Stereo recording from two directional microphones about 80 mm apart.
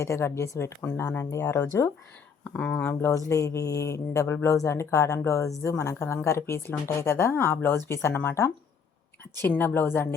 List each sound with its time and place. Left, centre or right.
0.0 s speech: left
0.8 s speech: left
2.5 s speech: centre
3.0 s speech: left